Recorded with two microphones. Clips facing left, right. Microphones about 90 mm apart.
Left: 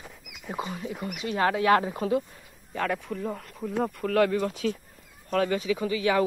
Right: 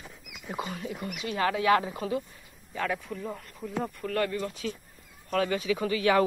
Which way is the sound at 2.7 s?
50° left (ahead or behind).